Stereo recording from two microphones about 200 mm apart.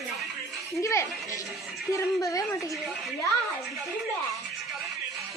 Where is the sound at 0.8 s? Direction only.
15° left (ahead or behind).